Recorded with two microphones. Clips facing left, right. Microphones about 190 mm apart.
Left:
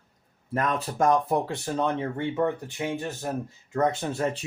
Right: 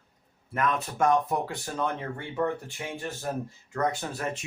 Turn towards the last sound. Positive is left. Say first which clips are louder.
# left 5 dB
turn(degrees=25)  # may be behind; listen again after turning